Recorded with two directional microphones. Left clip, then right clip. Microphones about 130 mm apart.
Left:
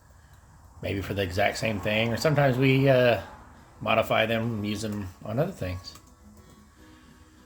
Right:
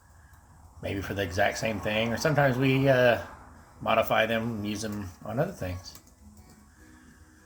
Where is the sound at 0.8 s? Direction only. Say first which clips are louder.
Left 2 dB; 20° left (ahead or behind).